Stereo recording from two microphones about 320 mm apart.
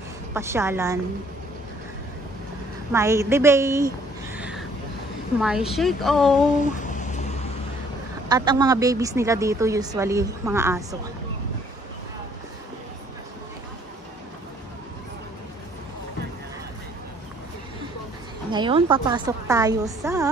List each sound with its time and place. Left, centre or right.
0.3 s speech: centre
2.9 s speech: centre
4.4 s vehicle: centre
5.4 s speech: centre
6.6 s a sound: left
8.3 s speech: centre
18.5 s speech: centre